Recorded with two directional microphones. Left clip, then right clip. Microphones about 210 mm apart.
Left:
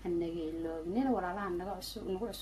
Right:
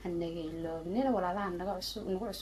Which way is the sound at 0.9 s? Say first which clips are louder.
Right 3 dB; 10° right (ahead or behind).